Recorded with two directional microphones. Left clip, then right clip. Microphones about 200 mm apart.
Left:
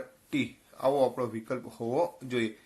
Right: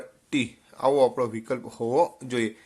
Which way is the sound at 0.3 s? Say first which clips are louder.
Right 5 dB; 50° right (ahead or behind).